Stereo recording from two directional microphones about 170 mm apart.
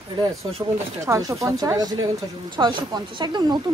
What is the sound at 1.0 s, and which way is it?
A woman's voice, 20° right (ahead or behind).